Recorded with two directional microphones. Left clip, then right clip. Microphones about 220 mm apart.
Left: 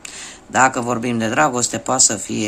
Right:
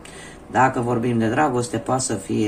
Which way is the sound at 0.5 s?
40° left (ahead or behind).